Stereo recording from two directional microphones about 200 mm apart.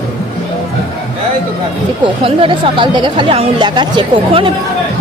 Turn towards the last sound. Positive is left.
turn(degrees=-20)  # may be behind; listen again after turning